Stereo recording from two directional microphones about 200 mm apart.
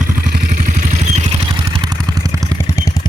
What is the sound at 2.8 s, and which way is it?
Vehicle, 15° left (ahead or behind).